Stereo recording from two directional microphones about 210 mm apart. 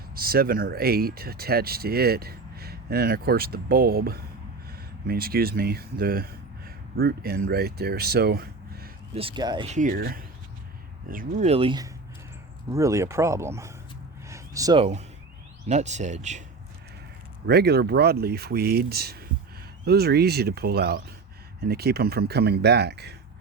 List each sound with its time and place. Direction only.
0.1 s speech: 45° right (ahead or behind)
9.1 s speech: 25° right (ahead or behind)
9.6 s speech: 35° right (ahead or behind); by 13.7 s 15° right (ahead or behind)
14.3 s a sound: 15° right (ahead or behind)
15.6 s speech: 35° right (ahead or behind)
17.4 s speech: 50° right (ahead or behind)